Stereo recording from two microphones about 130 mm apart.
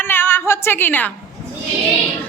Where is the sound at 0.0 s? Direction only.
15° left (ahead or behind).